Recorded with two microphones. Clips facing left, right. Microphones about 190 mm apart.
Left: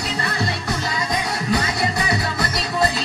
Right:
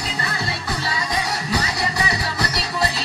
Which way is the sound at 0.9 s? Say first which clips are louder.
Left 1 dB; 50° left (ahead or behind).